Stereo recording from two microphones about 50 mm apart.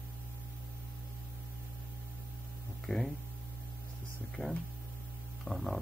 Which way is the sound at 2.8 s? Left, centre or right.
Centre.